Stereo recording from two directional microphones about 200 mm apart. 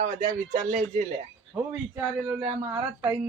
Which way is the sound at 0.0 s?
40° right (ahead or behind).